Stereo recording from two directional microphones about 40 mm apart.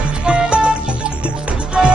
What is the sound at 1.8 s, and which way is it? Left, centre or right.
Music, centre.